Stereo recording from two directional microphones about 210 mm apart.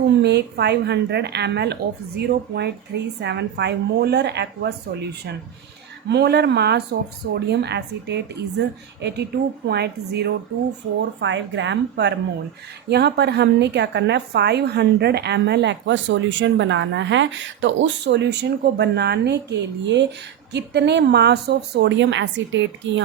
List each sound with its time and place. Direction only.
0.2 s a woman's voice: 50° right (ahead or behind)
6.1 s a woman's voice: 50° right (ahead or behind)